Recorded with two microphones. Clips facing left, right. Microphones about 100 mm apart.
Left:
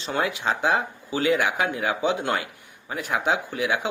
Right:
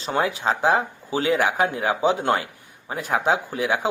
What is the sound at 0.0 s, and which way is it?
Speech, 35° right (ahead or behind).